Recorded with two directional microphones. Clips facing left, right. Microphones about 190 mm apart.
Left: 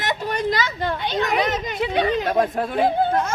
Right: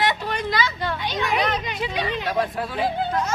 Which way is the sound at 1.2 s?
45° left (ahead or behind).